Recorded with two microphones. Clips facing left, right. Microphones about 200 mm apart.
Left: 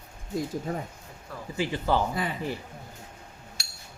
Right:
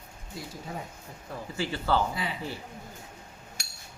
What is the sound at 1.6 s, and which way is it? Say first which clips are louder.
Speech: left 2 dB; 15° left (ahead or behind).